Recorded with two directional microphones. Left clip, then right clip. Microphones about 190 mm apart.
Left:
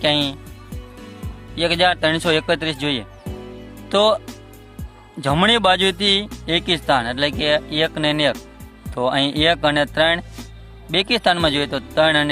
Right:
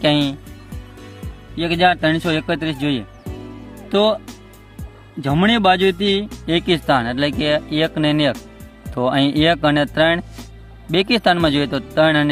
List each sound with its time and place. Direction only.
0.0 s speech: centre (ahead or behind)
1.5 s speech: 15° left (ahead or behind)
5.2 s speech: 20° left (ahead or behind)
6.2 s speech: centre (ahead or behind)